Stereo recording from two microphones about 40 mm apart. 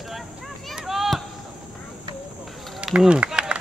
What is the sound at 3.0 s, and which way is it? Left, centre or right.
Speech, right.